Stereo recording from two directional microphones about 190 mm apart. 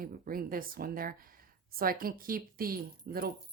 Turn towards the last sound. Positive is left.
turn(degrees=-50)  # may be behind; listen again after turning